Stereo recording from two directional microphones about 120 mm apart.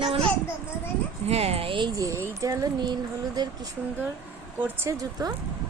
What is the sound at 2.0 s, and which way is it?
A woman's voice, 25° right (ahead or behind).